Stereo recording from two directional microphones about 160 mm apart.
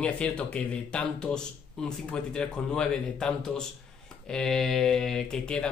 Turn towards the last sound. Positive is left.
turn(degrees=5)  # may be behind; listen again after turning